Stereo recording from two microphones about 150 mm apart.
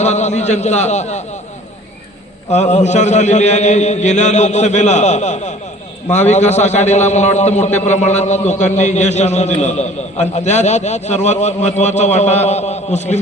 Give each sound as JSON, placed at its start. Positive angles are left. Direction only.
{"t": 0.0, "sound": "a man's voice", "side_deg": 50}
{"t": 2.5, "sound": "a man's voice", "side_deg": 50}